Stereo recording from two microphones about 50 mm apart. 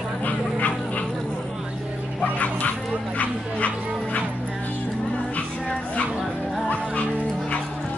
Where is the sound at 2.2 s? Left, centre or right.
Left.